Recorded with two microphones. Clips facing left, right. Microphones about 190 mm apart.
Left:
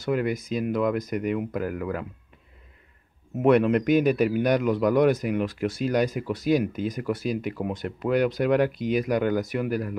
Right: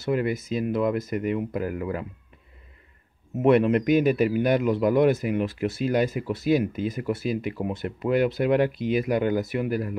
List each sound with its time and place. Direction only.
0.0 s speech: 5° right (ahead or behind)
3.4 s speech: centre (ahead or behind)
8.6 s speech: 45° left (ahead or behind)
8.9 s speech: 5° right (ahead or behind)